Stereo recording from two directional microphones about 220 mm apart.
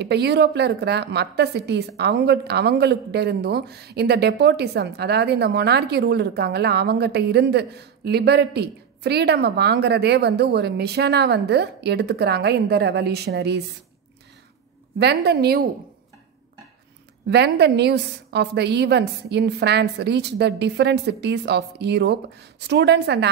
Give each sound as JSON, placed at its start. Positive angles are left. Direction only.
{"t": 0.0, "sound": "a woman's voice", "side_deg": -50}
{"t": 15.0, "sound": "a woman's voice", "side_deg": -50}
{"t": 17.3, "sound": "a woman's voice", "side_deg": -50}